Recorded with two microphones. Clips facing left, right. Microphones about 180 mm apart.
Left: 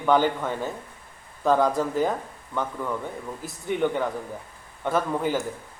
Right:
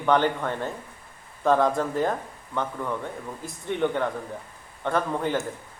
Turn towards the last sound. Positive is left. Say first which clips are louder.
# left 1 dB
turn(degrees=5)  # may be behind; listen again after turning